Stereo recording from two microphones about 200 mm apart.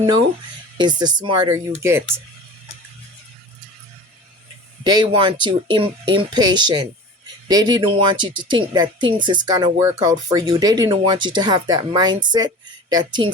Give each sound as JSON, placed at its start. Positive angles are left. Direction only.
{"t": 0.8, "sound": "speech", "side_deg": -20}
{"t": 4.8, "sound": "speech", "side_deg": -20}